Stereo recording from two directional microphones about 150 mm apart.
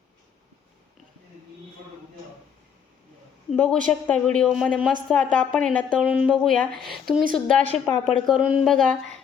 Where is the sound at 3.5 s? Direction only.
5° left (ahead or behind).